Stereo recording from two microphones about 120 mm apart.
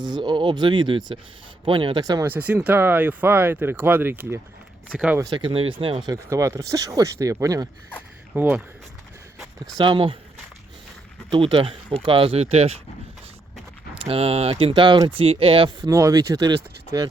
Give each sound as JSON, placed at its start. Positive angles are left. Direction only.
{"t": 0.0, "sound": "speech", "side_deg": -40}
{"t": 2.2, "sound": "speech", "side_deg": -15}
{"t": 5.3, "sound": "speech", "side_deg": -45}
{"t": 6.1, "sound": "speech", "side_deg": -25}
{"t": 8.4, "sound": "speech", "side_deg": -15}
{"t": 9.7, "sound": "speech", "side_deg": -45}
{"t": 11.3, "sound": "speech", "side_deg": -50}
{"t": 13.9, "sound": "speech", "side_deg": -50}
{"t": 14.7, "sound": "speech", "side_deg": -40}
{"t": 15.9, "sound": "speech", "side_deg": -25}